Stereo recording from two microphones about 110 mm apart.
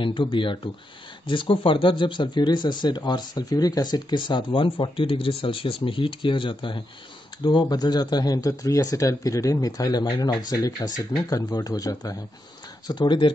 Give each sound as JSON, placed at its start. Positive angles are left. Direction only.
{"t": 0.0, "sound": "speech", "side_deg": 50}